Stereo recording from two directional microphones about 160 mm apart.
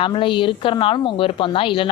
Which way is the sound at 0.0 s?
30° left (ahead or behind).